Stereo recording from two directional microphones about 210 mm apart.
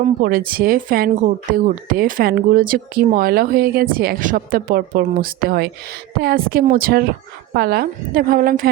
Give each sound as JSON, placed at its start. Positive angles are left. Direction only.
{"t": 0.0, "sound": "speech", "side_deg": -40}